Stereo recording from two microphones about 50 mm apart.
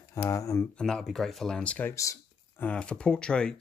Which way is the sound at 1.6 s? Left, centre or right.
Left.